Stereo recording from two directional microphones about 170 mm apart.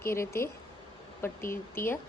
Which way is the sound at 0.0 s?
15° left (ahead or behind).